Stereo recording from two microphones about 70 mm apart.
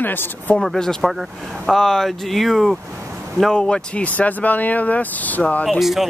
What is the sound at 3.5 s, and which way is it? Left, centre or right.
Speech, centre.